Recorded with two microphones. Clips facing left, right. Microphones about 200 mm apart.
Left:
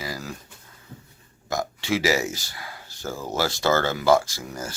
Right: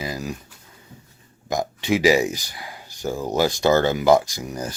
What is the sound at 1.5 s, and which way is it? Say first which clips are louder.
Speech: right 4 dB; 15° right (ahead or behind).